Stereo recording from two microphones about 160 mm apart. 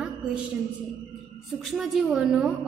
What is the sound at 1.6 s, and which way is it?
Speech, centre (ahead or behind).